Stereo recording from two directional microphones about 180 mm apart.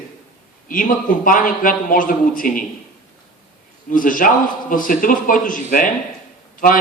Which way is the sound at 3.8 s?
50° left (ahead or behind).